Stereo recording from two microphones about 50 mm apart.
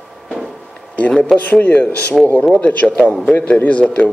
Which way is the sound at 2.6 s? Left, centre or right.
Left.